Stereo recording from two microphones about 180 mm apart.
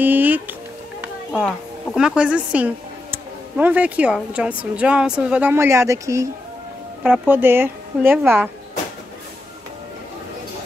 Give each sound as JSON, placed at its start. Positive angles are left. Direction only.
{"t": 0.0, "sound": "speech", "side_deg": -10}
{"t": 2.0, "sound": "speech", "side_deg": -5}